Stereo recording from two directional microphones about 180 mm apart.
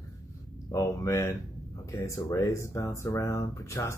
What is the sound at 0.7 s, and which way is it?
Speech, 15° left (ahead or behind).